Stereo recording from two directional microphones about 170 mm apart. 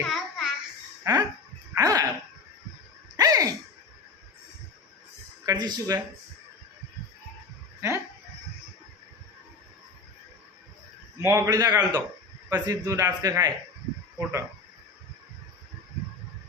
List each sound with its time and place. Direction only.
0.1 s child singing: centre (ahead or behind)
1.1 s speech: 20° right (ahead or behind)
1.7 s dog: 20° right (ahead or behind)
3.2 s a sound: 20° right (ahead or behind)
5.5 s speech: 25° right (ahead or behind)
7.8 s a sound: 15° right (ahead or behind)
11.2 s a man's voice: 15° right (ahead or behind)